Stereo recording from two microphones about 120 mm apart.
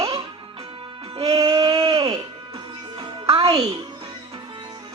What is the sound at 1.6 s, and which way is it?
Music, 35° right (ahead or behind).